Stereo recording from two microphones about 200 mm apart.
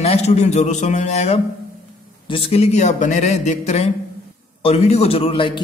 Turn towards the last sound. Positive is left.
turn(degrees=25)  # may be behind; listen again after turning